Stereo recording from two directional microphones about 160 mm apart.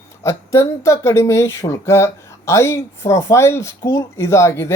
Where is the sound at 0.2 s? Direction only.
20° left (ahead or behind).